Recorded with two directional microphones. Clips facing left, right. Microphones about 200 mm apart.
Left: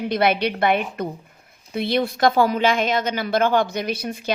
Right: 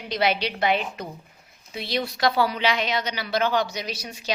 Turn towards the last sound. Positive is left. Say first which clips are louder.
# left 8 dB
turn(degrees=55)  # may be behind; listen again after turning